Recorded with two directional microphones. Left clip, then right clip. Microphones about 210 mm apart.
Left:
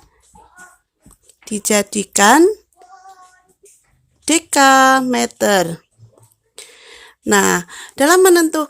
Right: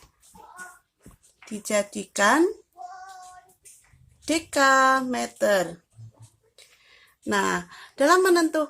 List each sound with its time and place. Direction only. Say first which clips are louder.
1.5 s speech: left 8 dB; 50° left (ahead or behind)
4.3 s speech: left 9 dB; 55° left (ahead or behind)